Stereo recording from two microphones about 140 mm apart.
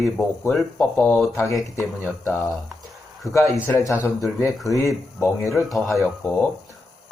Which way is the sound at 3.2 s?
20° left (ahead or behind).